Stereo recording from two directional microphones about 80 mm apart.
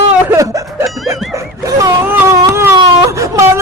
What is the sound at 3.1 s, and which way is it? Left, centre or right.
Whimper, right.